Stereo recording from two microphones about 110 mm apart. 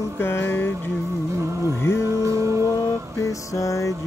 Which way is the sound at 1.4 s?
25° right (ahead or behind).